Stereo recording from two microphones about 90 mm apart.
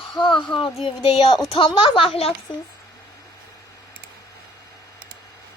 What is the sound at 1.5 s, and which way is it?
Speech, 75° left (ahead or behind).